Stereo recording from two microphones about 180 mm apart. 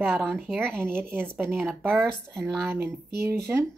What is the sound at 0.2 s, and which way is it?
Speech, centre (ahead or behind).